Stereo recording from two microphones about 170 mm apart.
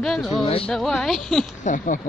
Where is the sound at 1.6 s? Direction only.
50° left (ahead or behind).